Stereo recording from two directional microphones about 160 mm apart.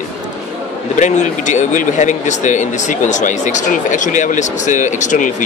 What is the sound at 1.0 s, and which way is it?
Speech, 50° left (ahead or behind).